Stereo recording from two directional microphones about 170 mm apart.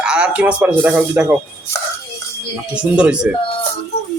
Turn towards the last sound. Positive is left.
turn(degrees=-5)  # may be behind; listen again after turning